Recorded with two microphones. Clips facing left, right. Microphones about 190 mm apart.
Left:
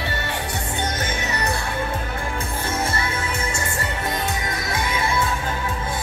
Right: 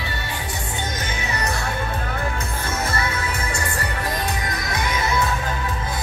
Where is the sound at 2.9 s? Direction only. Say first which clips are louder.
Right 1 dB; 25° left (ahead or behind).